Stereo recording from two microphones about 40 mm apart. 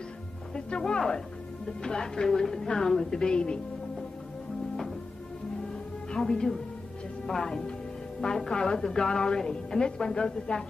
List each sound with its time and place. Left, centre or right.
0.6 s a woman's voice: left
5.7 s music: centre
7.2 s a woman's voice: centre